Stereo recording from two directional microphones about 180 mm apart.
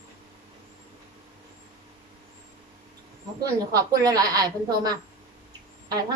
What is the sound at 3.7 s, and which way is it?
Speech, 20° right (ahead or behind).